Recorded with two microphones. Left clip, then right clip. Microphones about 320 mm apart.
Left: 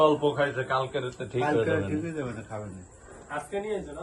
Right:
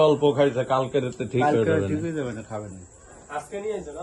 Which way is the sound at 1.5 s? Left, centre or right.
Right.